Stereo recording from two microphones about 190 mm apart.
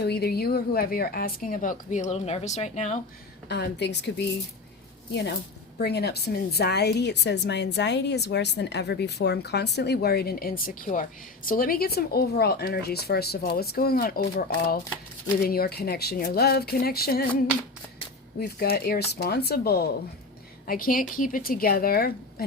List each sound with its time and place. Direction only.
0.0 s a woman's voice: 55° left (ahead or behind); by 3.0 s 40° left (ahead or behind)
3.5 s a woman's voice: 60° left (ahead or behind)
15.4 s a woman's voice: 55° left (ahead or behind)
18.3 s a woman's voice: 55° left (ahead or behind)